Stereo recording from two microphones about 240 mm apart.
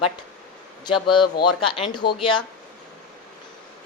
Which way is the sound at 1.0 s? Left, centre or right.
Centre.